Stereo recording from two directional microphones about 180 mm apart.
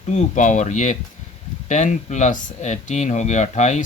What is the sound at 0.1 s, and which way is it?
Speech, 40° left (ahead or behind).